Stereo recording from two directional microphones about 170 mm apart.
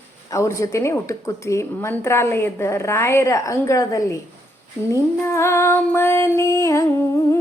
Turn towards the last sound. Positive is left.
turn(degrees=15)  # may be behind; listen again after turning